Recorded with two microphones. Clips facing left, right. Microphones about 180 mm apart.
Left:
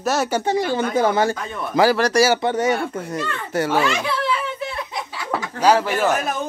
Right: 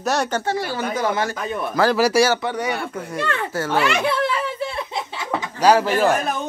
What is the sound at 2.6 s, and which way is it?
Speech, 45° left (ahead or behind).